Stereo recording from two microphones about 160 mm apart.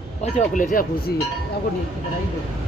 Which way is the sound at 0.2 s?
50° left (ahead or behind).